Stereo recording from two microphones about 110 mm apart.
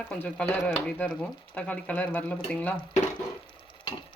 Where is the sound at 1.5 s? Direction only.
10° left (ahead or behind).